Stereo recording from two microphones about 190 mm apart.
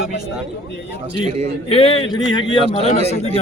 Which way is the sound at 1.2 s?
35° right (ahead or behind).